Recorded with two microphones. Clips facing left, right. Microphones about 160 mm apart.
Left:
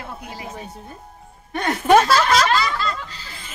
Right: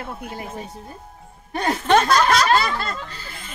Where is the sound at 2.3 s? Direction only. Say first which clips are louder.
Even; 55° right (ahead or behind).